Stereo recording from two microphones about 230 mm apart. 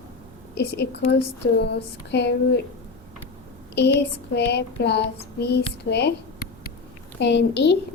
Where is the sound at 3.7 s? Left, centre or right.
Left.